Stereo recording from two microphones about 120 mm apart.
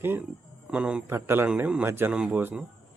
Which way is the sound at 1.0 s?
20° right (ahead or behind).